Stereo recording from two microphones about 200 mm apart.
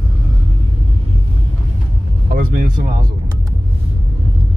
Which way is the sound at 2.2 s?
45° right (ahead or behind).